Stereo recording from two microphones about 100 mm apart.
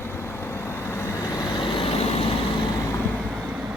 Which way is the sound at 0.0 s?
25° left (ahead or behind).